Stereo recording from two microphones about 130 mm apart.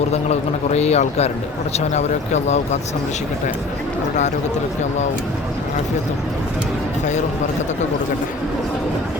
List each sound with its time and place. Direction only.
0.1 s a man's voice: 55° left (ahead or behind)